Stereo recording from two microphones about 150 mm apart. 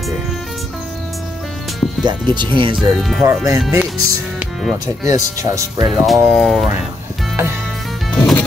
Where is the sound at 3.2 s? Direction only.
20° right (ahead or behind).